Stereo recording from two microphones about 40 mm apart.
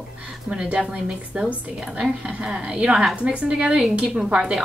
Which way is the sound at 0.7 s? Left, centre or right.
Right.